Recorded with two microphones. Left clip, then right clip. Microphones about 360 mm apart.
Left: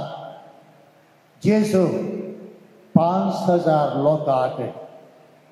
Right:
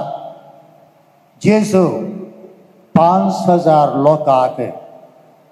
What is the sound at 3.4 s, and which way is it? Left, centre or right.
A man's voice, right.